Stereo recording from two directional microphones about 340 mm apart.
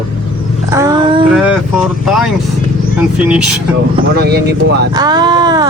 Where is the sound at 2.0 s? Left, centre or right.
Centre.